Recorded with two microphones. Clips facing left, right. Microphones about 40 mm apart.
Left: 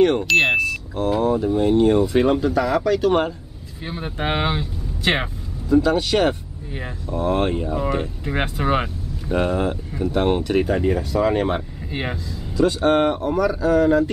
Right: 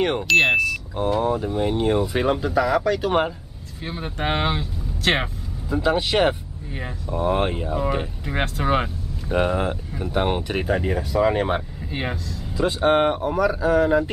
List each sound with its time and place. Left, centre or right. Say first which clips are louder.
0.0 s speech: left 6 dB; centre
0.3 s speech: even; centre
3.8 s speech: left 1 dB; centre
5.7 s speech: left 4 dB; centre
6.7 s speech: left 1 dB; centre
8.3 s speech: left 1 dB; centre
9.3 s speech: left 1 dB; centre
12.5 s speech: left 2 dB; centre